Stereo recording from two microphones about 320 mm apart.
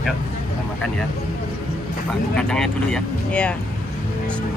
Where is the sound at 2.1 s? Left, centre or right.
Centre.